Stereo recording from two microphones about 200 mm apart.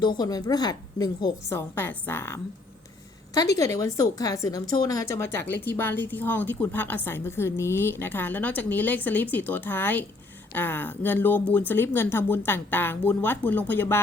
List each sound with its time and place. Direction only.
0.0 s a woman's voice: 20° left (ahead or behind)